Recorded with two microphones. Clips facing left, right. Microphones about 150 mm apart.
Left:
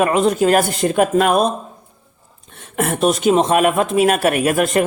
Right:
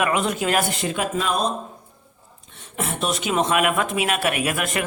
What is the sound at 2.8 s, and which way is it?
Speech, 50° left (ahead or behind).